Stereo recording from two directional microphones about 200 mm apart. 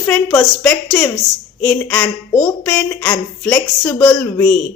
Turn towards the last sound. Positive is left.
turn(degrees=10)  # may be behind; listen again after turning